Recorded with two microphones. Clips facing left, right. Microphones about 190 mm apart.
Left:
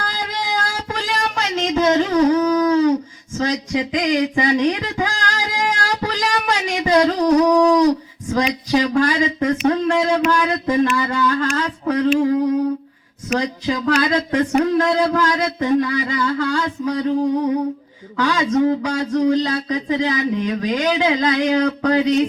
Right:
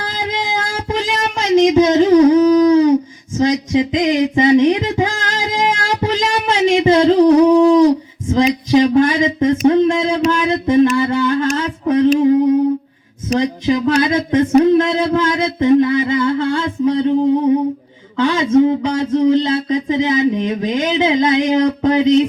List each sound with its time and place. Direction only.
0.0 s child singing: 20° right (ahead or behind)
3.3 s a sound: 20° right (ahead or behind)
8.3 s speech: 20° right (ahead or behind)
18.2 s speech: 25° right (ahead or behind)